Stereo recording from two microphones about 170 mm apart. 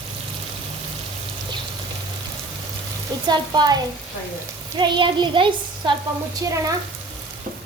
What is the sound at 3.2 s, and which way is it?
Speech, 25° right (ahead or behind).